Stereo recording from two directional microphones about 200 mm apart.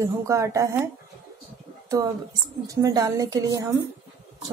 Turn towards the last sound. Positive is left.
turn(degrees=-15)  # may be behind; listen again after turning